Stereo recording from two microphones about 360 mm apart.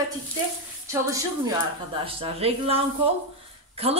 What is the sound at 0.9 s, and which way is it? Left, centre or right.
A woman's voice, centre.